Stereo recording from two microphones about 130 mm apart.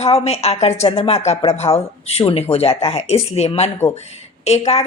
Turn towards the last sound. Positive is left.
turn(degrees=55)  # may be behind; listen again after turning